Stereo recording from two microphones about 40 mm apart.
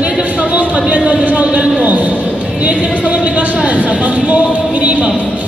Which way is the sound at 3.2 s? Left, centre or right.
Right.